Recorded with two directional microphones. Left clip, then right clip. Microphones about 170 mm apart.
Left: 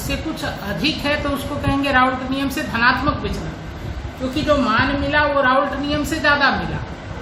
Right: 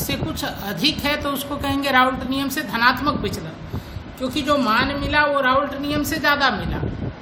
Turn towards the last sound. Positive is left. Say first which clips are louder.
# left 2 dB
turn(degrees=-55)  # may be behind; listen again after turning